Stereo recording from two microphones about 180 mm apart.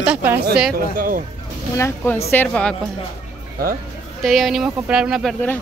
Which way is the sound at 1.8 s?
15° left (ahead or behind).